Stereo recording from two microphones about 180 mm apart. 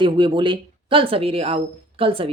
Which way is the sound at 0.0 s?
25° right (ahead or behind).